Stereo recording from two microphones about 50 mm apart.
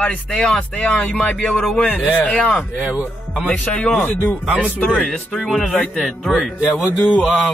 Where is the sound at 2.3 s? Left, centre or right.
Centre.